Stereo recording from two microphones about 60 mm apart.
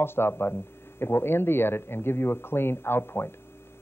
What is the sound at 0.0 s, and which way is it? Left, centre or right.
Speech, left.